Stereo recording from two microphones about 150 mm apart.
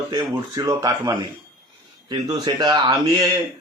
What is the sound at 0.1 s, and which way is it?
A man's voice, 25° right (ahead or behind).